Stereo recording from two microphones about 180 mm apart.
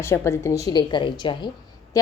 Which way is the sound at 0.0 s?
15° left (ahead or behind).